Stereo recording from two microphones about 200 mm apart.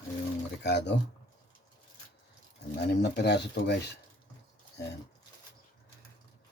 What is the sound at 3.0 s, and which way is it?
Speech, 55° left (ahead or behind).